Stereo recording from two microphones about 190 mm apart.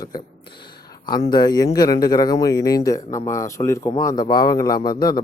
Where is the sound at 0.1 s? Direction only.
20° left (ahead or behind).